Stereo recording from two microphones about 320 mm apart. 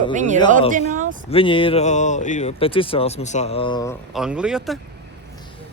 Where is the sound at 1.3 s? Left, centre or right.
Centre.